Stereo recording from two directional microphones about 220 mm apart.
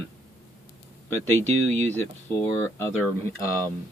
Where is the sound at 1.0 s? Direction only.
10° left (ahead or behind).